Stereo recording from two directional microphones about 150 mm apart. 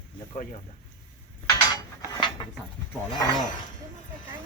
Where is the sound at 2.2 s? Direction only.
35° left (ahead or behind).